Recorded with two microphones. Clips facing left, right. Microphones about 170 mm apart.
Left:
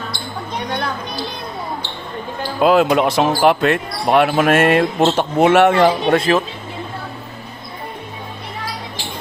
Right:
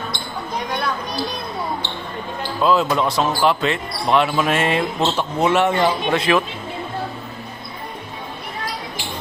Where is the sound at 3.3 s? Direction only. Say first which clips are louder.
Left 4 dB; 55° left (ahead or behind).